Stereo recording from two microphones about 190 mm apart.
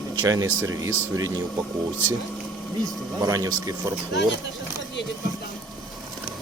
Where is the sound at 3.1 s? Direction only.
20° right (ahead or behind).